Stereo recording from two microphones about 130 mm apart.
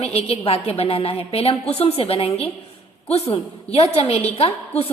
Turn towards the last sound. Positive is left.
turn(degrees=50)  # may be behind; listen again after turning